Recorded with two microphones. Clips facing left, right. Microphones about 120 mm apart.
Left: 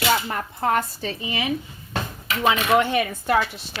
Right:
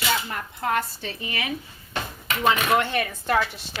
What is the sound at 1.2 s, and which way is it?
Speech, 20° left (ahead or behind).